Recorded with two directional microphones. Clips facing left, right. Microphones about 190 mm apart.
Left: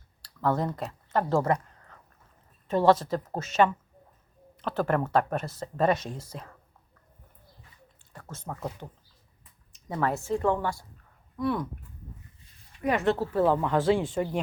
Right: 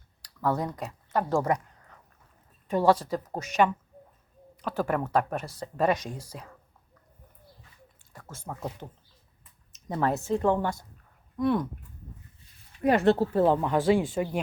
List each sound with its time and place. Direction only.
0.2 s a sound: 10° right (ahead or behind)
2.6 s speech: 10° right (ahead or behind)
8.3 s speech: 10° right (ahead or behind)
9.7 s a sound: 20° right (ahead or behind)
10.2 s speech: 20° right (ahead or behind)
12.8 s speech: 30° right (ahead or behind)
13.6 s speech: 15° right (ahead or behind)